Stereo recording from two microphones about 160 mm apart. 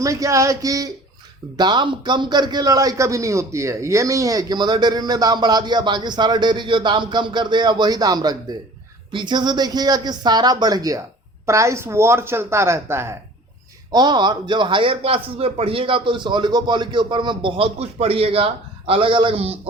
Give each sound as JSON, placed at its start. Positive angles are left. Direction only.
{"t": 0.0, "sound": "a man's voice", "side_deg": -20}
{"t": 13.9, "sound": "a man's voice", "side_deg": -25}